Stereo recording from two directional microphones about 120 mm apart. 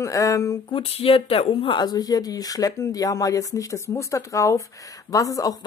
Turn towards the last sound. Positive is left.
turn(degrees=30)  # may be behind; listen again after turning